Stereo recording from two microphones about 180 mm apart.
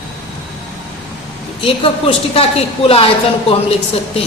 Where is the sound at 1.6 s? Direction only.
30° left (ahead or behind).